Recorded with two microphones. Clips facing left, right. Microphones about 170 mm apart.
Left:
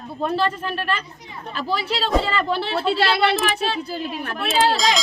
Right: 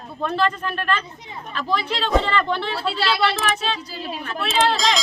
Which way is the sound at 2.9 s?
55° left (ahead or behind).